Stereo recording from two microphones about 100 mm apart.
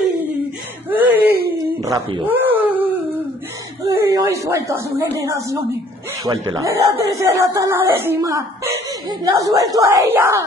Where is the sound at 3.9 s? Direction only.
35° right (ahead or behind).